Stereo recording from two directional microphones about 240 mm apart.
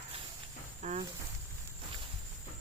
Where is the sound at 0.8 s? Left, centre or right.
Right.